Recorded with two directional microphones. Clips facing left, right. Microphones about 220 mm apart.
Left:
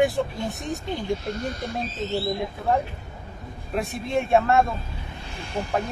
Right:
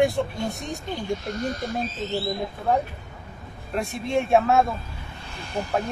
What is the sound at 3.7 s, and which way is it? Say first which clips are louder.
Speech: right 1 dB; centre (ahead or behind).